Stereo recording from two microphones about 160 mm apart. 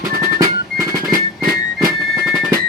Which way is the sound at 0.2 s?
20° right (ahead or behind).